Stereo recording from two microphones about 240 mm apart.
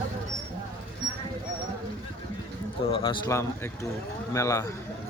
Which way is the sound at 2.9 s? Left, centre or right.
Left.